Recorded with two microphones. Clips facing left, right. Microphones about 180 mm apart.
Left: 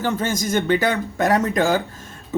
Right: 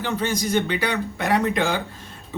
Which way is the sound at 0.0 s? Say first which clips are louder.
Left 2 dB; 45° left (ahead or behind).